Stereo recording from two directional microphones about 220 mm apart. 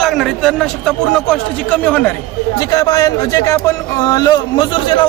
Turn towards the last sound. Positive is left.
turn(degrees=20)  # may be behind; listen again after turning